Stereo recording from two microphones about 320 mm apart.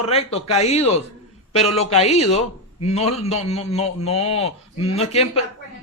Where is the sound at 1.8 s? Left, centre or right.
Centre.